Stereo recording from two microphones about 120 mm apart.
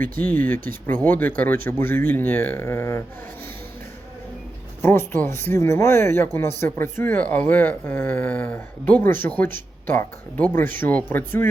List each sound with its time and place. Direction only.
0.0 s speech: 15° left (ahead or behind)
2.6 s speech: 25° left (ahead or behind)
4.8 s speech: 20° left (ahead or behind)